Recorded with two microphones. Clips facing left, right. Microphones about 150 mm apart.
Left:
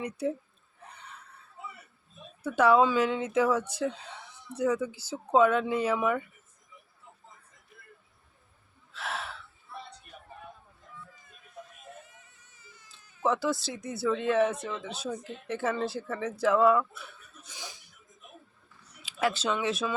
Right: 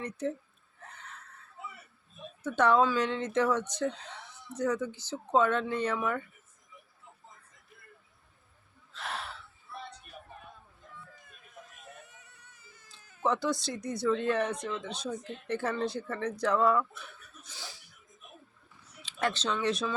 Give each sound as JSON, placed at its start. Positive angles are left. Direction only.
{"t": 0.0, "sound": "speech", "side_deg": 10}
{"t": 2.4, "sound": "speech", "side_deg": 10}
{"t": 8.9, "sound": "gasp", "side_deg": 0}
{"t": 12.0, "sound": "baby cry", "side_deg": -65}
{"t": 13.2, "sound": "speech", "side_deg": 5}
{"t": 17.5, "sound": "music", "side_deg": 15}
{"t": 19.0, "sound": "speech", "side_deg": 5}